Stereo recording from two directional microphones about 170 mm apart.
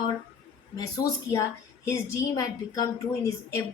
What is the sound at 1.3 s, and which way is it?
A woman's voice, 15° left (ahead or behind).